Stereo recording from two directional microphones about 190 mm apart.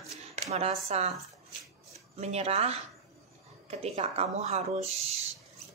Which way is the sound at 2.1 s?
35° right (ahead or behind).